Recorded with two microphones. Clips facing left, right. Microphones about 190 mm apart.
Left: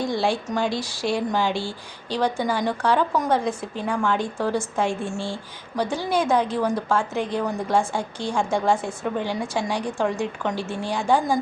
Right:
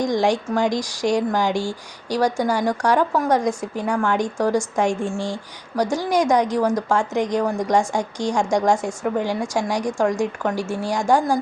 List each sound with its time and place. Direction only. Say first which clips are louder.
0.0 s a woman's voice: right 4 dB; 15° right (ahead or behind)